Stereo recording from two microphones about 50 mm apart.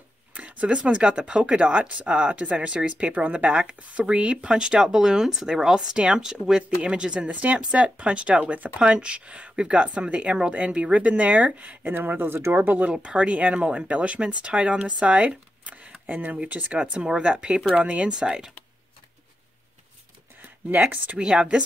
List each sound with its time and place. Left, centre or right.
0.3 s speech: right
11.8 s speech: right
16.9 s speech: centre
20.4 s speech: right
21.2 s speech: centre